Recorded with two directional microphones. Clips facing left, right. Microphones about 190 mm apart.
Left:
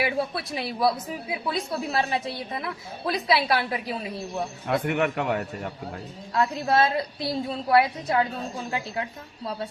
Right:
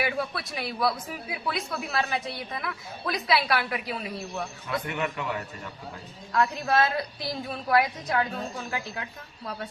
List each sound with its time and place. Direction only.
0.0 s a man's voice: 25° left (ahead or behind)
4.6 s a man's voice: 60° left (ahead or behind)
6.3 s a man's voice: 25° left (ahead or behind)